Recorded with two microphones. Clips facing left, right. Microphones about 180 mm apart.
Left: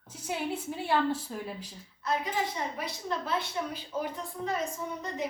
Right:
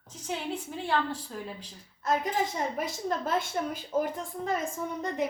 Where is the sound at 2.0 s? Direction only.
50° right (ahead or behind).